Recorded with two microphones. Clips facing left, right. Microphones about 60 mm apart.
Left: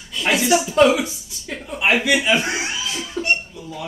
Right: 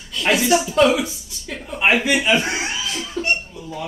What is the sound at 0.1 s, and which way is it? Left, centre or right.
A woman's voice, centre.